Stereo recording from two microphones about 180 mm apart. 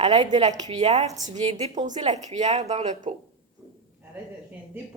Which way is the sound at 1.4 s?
40° right (ahead or behind).